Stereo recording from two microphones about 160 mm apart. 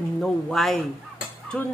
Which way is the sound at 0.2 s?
Centre (ahead or behind).